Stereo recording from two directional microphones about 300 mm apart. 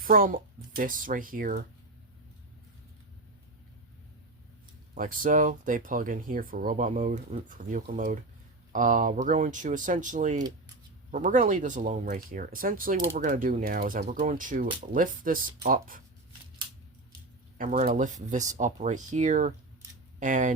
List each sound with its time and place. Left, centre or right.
0.0 s a woman's voice: right
4.9 s speech: right
17.6 s speech: right